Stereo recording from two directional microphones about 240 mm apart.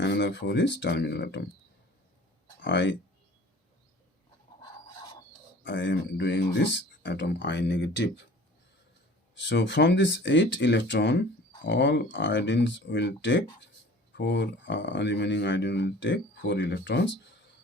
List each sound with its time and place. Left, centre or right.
0.0 s speech: left
2.6 s speech: left
5.6 s speech: left
9.3 s speech: left